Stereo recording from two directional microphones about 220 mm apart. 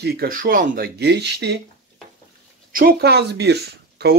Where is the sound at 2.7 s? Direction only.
45° right (ahead or behind).